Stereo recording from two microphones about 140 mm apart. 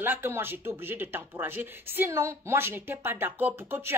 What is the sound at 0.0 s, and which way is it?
Speech, 15° right (ahead or behind).